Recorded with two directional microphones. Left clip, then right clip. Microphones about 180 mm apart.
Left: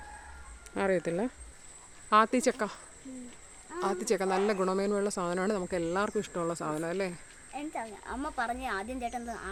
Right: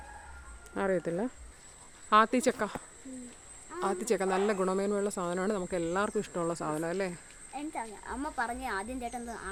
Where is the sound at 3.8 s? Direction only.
Centre (ahead or behind).